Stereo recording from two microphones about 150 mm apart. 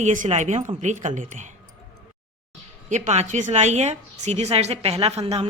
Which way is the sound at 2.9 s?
50° right (ahead or behind).